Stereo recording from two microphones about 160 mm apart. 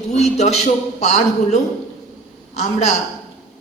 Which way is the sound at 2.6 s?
45° left (ahead or behind).